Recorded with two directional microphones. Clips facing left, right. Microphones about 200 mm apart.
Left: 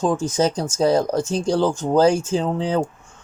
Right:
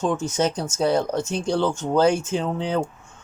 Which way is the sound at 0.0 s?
35° left (ahead or behind).